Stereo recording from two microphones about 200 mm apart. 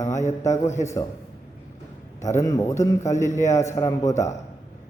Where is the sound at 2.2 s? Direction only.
15° left (ahead or behind).